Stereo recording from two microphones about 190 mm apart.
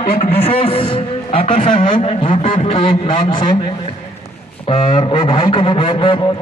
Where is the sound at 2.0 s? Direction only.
25° left (ahead or behind).